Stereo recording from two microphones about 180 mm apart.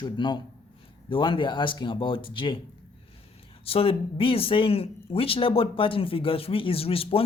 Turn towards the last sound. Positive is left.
turn(degrees=30)  # may be behind; listen again after turning